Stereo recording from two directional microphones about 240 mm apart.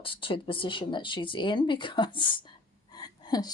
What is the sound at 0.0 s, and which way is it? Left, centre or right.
Speech, left.